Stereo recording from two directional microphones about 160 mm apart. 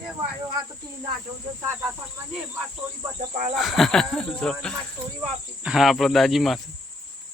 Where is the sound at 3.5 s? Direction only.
Centre (ahead or behind).